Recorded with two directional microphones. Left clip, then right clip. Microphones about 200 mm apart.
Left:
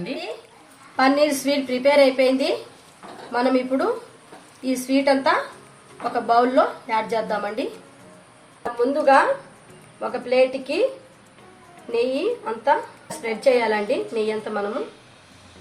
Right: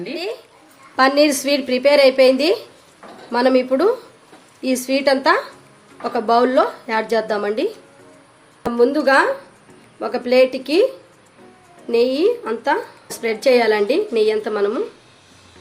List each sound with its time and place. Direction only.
0.9 s a woman's voice: 40° right (ahead or behind)
8.8 s a woman's voice: 50° right (ahead or behind)
11.9 s a woman's voice: 50° right (ahead or behind)